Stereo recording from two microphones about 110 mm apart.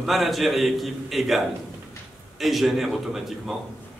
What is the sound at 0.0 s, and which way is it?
A man's voice, centre (ahead or behind).